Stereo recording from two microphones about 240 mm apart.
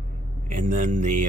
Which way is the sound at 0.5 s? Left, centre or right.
Right.